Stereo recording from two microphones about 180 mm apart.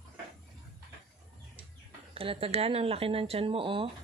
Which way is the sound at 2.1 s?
30° right (ahead or behind).